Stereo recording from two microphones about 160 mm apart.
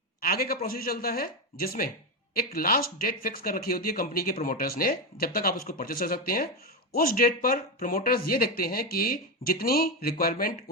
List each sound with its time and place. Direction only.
0.2 s speech: 70° left (ahead or behind)